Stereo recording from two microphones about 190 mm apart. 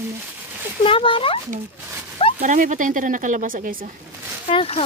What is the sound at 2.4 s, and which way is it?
A woman's voice, 40° right (ahead or behind).